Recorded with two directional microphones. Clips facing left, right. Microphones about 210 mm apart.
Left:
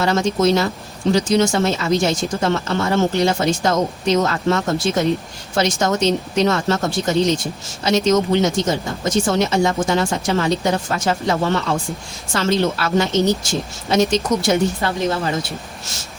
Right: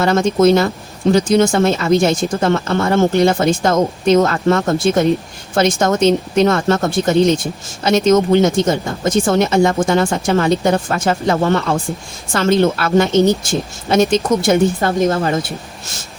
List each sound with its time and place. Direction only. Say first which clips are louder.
0.0 s speech: right 5 dB; 55° right (ahead or behind)